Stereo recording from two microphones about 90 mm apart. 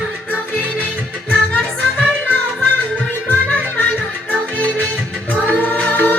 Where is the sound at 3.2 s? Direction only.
20° left (ahead or behind).